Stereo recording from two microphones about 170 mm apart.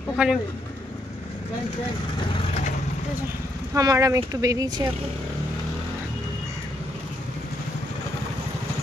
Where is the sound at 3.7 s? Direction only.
20° right (ahead or behind).